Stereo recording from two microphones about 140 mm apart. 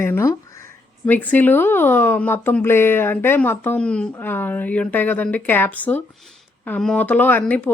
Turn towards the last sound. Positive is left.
turn(degrees=10)  # may be behind; listen again after turning